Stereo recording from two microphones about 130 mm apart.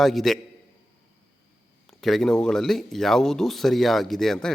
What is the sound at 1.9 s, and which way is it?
Speech, centre (ahead or behind).